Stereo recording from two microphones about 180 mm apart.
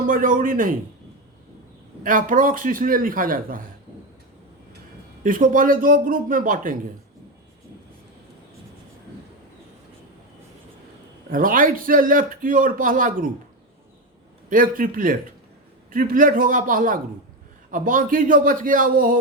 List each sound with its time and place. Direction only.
0.1 s a man's voice: 50° right (ahead or behind)
2.0 s a man's voice: 50° right (ahead or behind)
5.2 s a man's voice: 50° right (ahead or behind)
11.3 s a man's voice: 50° right (ahead or behind)
14.5 s a man's voice: 50° right (ahead or behind)